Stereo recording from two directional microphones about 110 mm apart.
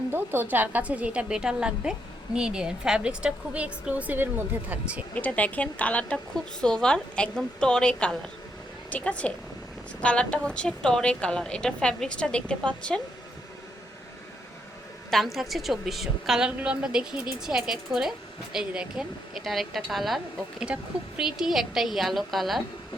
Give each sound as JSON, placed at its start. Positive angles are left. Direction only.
{"t": 0.1, "sound": "a woman's voice", "side_deg": -20}
{"t": 5.1, "sound": "a woman's voice", "side_deg": 10}
{"t": 15.1, "sound": "a woman's voice", "side_deg": 0}